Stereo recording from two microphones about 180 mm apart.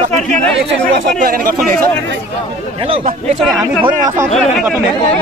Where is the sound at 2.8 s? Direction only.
30° right (ahead or behind).